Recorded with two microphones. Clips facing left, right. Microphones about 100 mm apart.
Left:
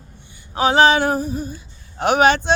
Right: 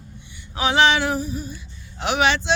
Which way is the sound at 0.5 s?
40° left (ahead or behind).